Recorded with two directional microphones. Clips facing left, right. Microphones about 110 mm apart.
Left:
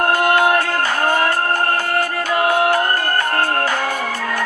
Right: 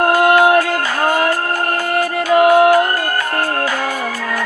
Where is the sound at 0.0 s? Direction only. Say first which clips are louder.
Right 4 dB; 20° right (ahead or behind).